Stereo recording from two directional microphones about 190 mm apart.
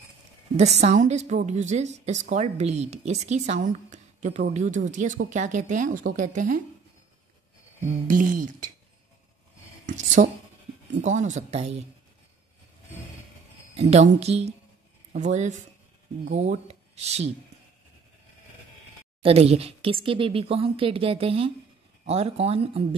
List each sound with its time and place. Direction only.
0.6 s a woman's voice: 35° right (ahead or behind)
8.1 s speech: 45° right (ahead or behind)
9.8 s a woman's voice: 40° right (ahead or behind)
13.7 s a woman's voice: 35° right (ahead or behind)
19.2 s a woman's voice: 30° right (ahead or behind)